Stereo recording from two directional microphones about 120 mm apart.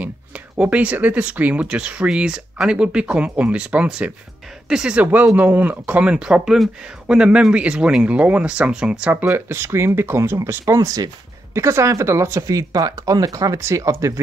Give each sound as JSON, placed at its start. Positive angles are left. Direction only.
{"t": 0.0, "sound": "speech", "side_deg": -10}
{"t": 9.2, "sound": "speech", "side_deg": -20}